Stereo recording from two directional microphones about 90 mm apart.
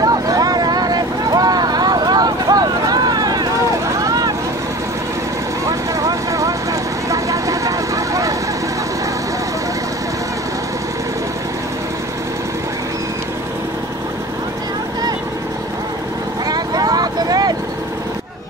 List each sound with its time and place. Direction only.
0.0 s vehicle: 45° right (ahead or behind)
5.7 s vehicle: 40° right (ahead or behind)
16.4 s vehicle: 45° right (ahead or behind)